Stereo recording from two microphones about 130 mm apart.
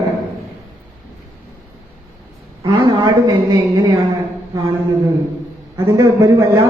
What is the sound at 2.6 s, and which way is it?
Speech, 35° right (ahead or behind).